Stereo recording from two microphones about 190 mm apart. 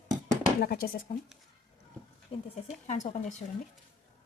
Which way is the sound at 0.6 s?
50° left (ahead or behind).